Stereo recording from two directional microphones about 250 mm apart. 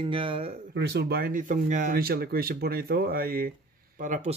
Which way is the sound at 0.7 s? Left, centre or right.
Right.